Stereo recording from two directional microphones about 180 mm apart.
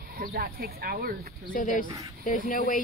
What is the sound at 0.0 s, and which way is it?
Speech, 55° right (ahead or behind).